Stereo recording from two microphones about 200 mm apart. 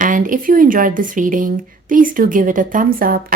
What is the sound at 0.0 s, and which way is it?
Speech, 40° right (ahead or behind).